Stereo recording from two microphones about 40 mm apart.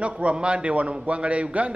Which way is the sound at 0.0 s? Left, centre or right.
Right.